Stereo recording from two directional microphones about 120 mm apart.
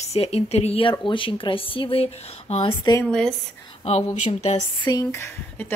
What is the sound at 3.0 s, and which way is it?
Speech, 5° left (ahead or behind).